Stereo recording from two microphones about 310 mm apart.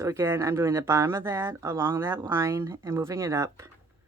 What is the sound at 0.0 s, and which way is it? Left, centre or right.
Speech, centre.